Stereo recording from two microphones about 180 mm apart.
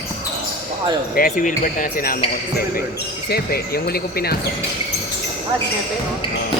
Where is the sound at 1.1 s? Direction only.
50° left (ahead or behind).